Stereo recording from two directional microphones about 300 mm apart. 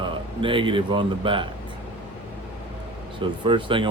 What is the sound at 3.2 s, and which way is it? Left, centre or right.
Speech, centre.